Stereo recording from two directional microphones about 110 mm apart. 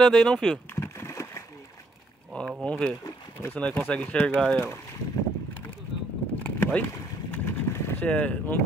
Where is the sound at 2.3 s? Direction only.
10° left (ahead or behind).